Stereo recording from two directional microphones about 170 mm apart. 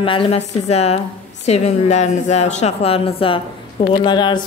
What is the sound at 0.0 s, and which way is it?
A woman's voice, 30° left (ahead or behind).